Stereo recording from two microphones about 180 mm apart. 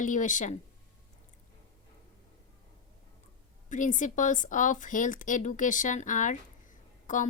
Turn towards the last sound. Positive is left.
turn(degrees=45)  # may be behind; listen again after turning